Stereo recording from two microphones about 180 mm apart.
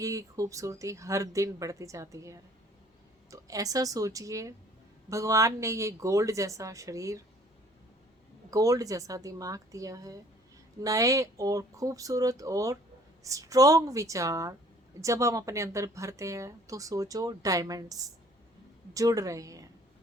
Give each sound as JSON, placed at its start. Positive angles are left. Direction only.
{"t": 0.0, "sound": "speech", "side_deg": -20}
{"t": 8.4, "sound": "a woman's voice", "side_deg": -20}